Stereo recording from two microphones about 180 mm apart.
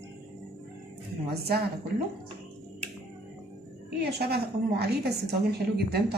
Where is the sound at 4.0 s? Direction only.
65° right (ahead or behind).